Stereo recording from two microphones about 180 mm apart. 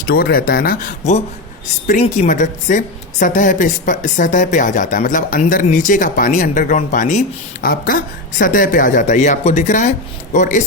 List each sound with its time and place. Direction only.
0.1 s a woman's voice: 55° left (ahead or behind)